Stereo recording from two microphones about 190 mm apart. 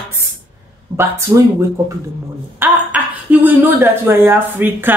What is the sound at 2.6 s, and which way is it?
Speech, 10° right (ahead or behind).